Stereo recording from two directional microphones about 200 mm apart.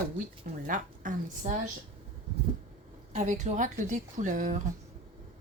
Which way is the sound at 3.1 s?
35° right (ahead or behind).